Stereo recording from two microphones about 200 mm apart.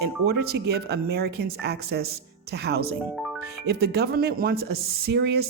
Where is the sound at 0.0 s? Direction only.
55° right (ahead or behind).